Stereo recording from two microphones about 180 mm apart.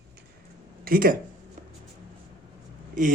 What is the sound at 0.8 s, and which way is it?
Speech, 55° right (ahead or behind).